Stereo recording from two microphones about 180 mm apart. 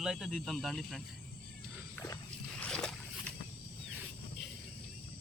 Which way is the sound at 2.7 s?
5° left (ahead or behind).